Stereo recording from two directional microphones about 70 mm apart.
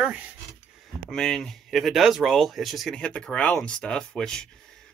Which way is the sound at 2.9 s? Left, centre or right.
Centre.